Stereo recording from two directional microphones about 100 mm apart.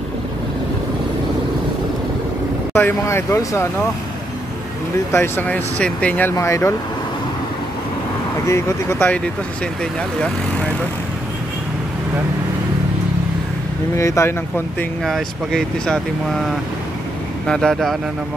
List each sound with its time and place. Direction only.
2.7 s speech: 25° left (ahead or behind)
5.1 s speech: 25° left (ahead or behind)
6.3 s speech: 30° left (ahead or behind)
8.5 s speech: 30° left (ahead or behind)
13.9 s speech: 30° left (ahead or behind)
15.0 s speech: 5° left (ahead or behind)